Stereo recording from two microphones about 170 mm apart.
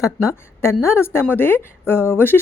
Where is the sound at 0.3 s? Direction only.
15° left (ahead or behind).